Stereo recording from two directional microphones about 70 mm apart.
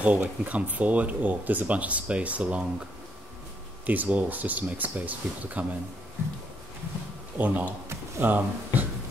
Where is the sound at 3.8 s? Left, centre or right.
Right.